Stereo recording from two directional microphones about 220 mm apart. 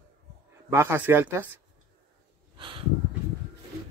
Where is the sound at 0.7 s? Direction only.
10° right (ahead or behind).